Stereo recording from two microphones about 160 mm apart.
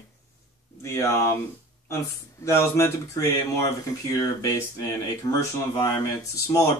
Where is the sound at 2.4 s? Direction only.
15° left (ahead or behind).